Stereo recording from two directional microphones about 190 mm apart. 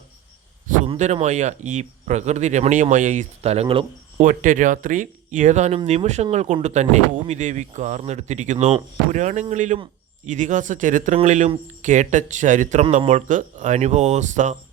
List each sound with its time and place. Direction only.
0.9 s speech: 35° right (ahead or behind)
4.3 s speech: 40° right (ahead or behind)